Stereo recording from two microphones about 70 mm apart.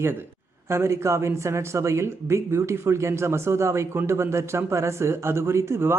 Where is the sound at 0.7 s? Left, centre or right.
Right.